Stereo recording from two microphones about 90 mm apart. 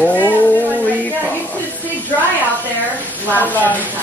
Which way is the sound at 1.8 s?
20° left (ahead or behind).